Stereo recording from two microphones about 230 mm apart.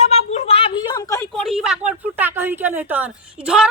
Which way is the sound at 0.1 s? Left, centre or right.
Left.